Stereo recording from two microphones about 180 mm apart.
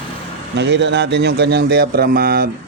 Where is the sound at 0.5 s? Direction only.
80° right.